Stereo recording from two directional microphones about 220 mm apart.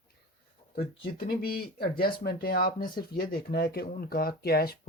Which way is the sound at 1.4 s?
45° left (ahead or behind).